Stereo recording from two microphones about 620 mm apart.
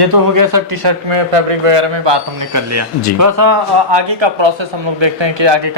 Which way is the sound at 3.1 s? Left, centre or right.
Right.